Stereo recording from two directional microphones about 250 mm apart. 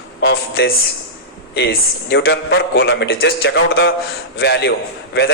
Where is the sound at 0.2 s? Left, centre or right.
Left.